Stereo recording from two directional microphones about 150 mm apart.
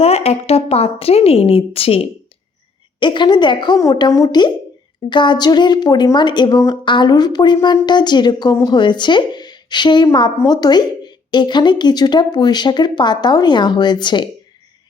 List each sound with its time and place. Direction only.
0.0 s a woman's voice: 45° left (ahead or behind)